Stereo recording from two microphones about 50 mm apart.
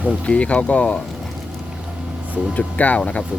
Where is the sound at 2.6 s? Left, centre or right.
Left.